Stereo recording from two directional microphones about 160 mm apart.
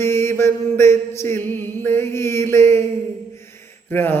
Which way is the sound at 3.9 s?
15° left (ahead or behind).